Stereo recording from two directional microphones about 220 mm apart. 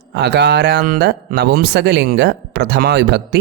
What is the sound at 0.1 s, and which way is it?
Speech, 50° right (ahead or behind).